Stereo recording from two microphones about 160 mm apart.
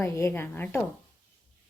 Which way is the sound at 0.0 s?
15° left (ahead or behind).